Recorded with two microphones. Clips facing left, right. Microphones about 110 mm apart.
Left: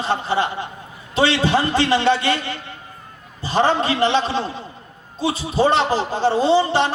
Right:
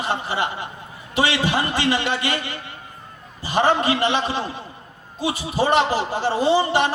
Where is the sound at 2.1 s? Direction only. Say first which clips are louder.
Left 6 dB; 15° right (ahead or behind).